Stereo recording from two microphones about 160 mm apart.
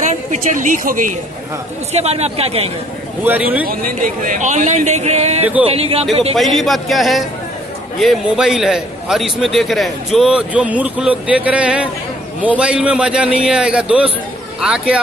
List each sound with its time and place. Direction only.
0.1 s a woman's voice: 50° right (ahead or behind)
1.9 s a man's voice: 40° right (ahead or behind)
3.3 s a man's voice: 10° right (ahead or behind)
3.6 s a man's voice: 60° right (ahead or behind); by 5.4 s 45° right (ahead or behind)
5.4 s a man's voice: 10° right (ahead or behind)
5.7 s a man's voice: 40° right (ahead or behind)
6.3 s a man's voice: centre (ahead or behind)